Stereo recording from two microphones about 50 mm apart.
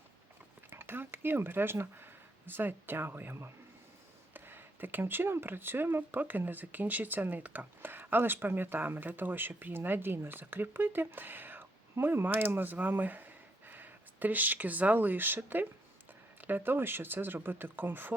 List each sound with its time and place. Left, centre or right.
0.7 s speech: right
4.4 s speech: right